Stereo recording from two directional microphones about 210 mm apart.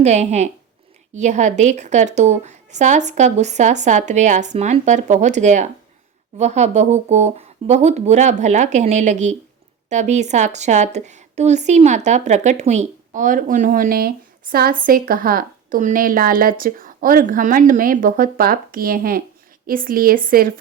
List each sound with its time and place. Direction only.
0.0 s a woman's voice: 35° right (ahead or behind)